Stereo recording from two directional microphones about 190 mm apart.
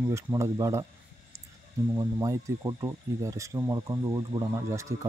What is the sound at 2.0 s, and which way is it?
Speech, 15° right (ahead or behind).